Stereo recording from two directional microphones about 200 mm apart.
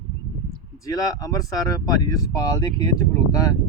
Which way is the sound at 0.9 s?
15° left (ahead or behind).